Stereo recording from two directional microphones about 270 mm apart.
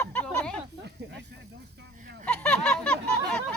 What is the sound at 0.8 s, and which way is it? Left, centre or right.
Speech, right.